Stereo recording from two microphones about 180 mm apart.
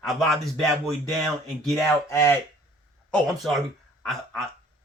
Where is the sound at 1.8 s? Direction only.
15° left (ahead or behind).